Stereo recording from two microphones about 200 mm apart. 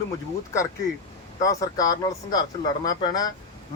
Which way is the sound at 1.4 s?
15° left (ahead or behind).